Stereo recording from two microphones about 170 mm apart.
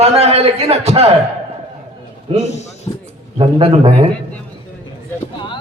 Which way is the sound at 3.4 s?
35° right (ahead or behind).